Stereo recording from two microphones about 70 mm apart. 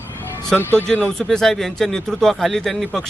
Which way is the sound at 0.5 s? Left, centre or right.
Right.